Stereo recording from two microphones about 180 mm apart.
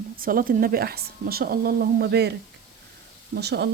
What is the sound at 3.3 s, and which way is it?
Speech, 65° right (ahead or behind).